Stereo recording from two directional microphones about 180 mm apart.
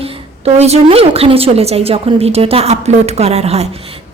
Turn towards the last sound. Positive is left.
turn(degrees=-35)  # may be behind; listen again after turning